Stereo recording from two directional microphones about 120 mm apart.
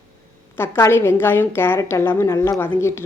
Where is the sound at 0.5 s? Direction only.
20° left (ahead or behind).